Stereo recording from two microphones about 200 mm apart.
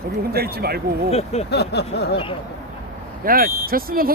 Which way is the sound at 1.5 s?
55° left (ahead or behind).